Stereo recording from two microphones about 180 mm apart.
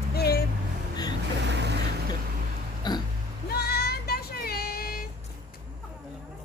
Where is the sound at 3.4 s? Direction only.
60° left (ahead or behind).